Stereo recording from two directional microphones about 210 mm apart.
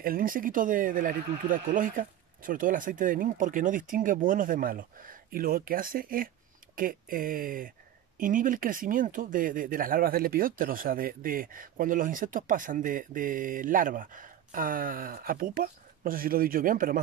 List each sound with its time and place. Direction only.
0.0 s speech: 45° right (ahead or behind)